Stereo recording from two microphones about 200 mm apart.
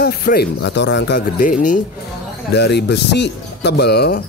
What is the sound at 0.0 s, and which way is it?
Speech, 50° left (ahead or behind).